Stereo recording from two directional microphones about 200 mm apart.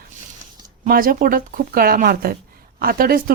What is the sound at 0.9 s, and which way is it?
Speech, 45° right (ahead or behind).